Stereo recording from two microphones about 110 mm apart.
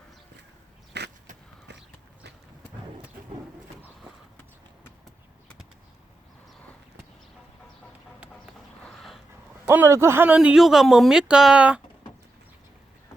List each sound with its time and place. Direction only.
9.6 s a man's voice: 25° right (ahead or behind)
10.3 s speech: 10° right (ahead or behind)